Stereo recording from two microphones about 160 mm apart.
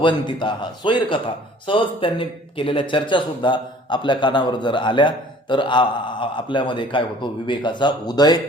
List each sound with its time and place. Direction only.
0.0 s speech: 30° left (ahead or behind)